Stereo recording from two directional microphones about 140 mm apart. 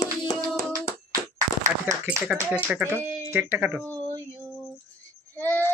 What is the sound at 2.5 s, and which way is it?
A man's voice, 10° right (ahead or behind).